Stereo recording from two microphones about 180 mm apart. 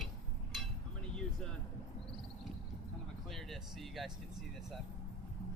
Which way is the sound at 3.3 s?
Centre (ahead or behind).